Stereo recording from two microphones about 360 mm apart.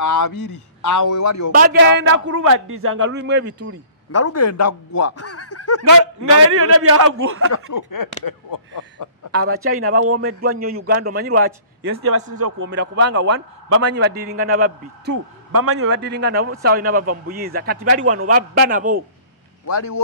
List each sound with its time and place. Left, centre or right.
0.0 s a sound: left
0.8 s a man's voice: left
1.5 s a man's voice: right
2.2 s speech: right
2.7 s a man's voice: right
4.1 s speech: left
6.5 s a man's voice: right
7.5 s a sound: left
9.4 s a man's voice: right
10.1 s a man's voice: right
11.3 s a man's voice: right
19.6 s a man's voice: left